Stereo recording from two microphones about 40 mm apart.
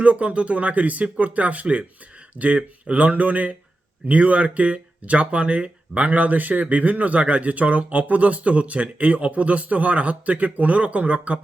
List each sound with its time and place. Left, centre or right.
0.0 s speech: right